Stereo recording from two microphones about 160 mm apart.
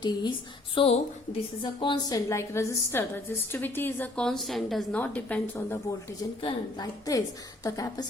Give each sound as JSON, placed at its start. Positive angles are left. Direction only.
{"t": 0.0, "sound": "a woman's voice", "side_deg": 30}
{"t": 0.8, "sound": "a woman's voice", "side_deg": 40}
{"t": 6.4, "sound": "a woman's voice", "side_deg": 25}